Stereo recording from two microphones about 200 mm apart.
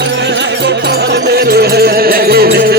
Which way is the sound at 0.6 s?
55° right (ahead or behind).